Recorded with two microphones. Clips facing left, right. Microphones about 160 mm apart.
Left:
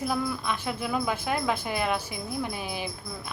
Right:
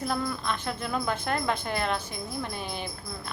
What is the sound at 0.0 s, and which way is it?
A woman's voice, 5° left (ahead or behind).